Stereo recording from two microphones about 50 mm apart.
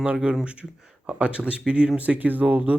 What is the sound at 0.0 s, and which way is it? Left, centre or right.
Speech, right.